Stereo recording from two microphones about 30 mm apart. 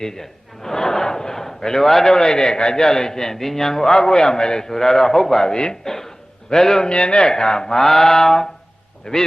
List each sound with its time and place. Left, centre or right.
0.0 s a sound: centre
2.1 s a man's voice: left
5.9 s a sound: centre
6.8 s a man's voice: left
7.9 s mantra: centre
9.1 s a man's voice: left